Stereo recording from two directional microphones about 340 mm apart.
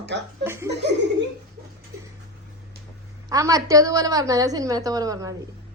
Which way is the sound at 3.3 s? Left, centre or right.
Centre.